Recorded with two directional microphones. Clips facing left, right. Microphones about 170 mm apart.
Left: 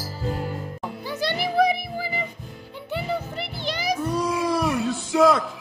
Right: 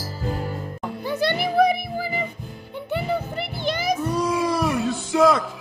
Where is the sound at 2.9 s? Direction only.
55° right (ahead or behind).